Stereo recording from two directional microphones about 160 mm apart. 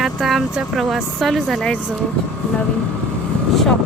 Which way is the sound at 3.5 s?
Centre (ahead or behind).